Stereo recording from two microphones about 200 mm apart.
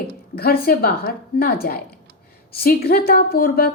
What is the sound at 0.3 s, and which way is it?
A woman's voice, 50° left (ahead or behind).